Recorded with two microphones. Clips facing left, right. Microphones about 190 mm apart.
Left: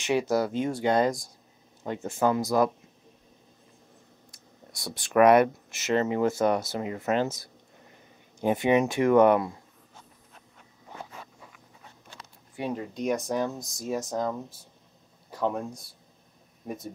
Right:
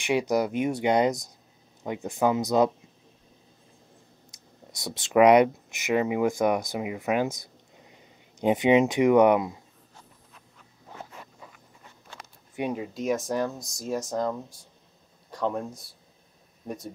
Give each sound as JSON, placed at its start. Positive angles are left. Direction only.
{"t": 0.0, "sound": "speech", "side_deg": -15}
{"t": 4.3, "sound": "speech", "side_deg": -20}
{"t": 12.5, "sound": "speech", "side_deg": -10}